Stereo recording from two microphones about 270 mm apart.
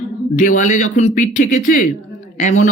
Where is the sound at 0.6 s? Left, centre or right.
Left.